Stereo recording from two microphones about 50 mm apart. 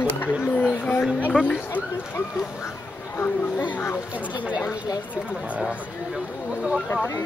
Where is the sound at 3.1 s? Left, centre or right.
Left.